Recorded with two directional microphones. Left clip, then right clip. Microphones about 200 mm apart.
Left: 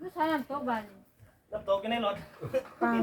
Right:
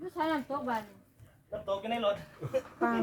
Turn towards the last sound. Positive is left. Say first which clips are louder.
# left 1 dB
turn(degrees=-10)  # may be behind; listen again after turning